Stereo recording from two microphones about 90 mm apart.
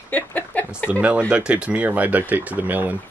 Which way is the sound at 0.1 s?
15° left (ahead or behind).